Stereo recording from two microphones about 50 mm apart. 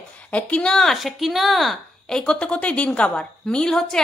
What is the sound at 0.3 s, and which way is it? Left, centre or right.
Speech, left.